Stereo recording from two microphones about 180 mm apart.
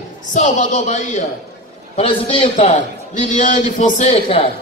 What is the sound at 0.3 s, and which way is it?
Speech, 40° left (ahead or behind).